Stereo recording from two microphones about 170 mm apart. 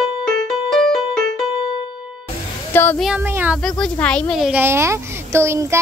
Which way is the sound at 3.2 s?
10° right (ahead or behind).